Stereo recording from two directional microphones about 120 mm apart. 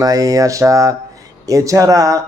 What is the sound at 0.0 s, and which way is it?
Speech, 30° right (ahead or behind).